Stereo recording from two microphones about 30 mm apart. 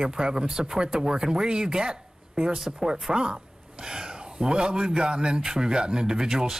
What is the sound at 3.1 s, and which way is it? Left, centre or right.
Speech, right.